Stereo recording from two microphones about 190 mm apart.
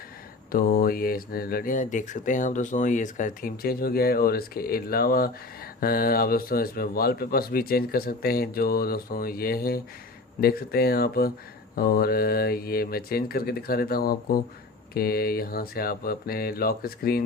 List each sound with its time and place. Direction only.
0.5 s speech: 50° left (ahead or behind)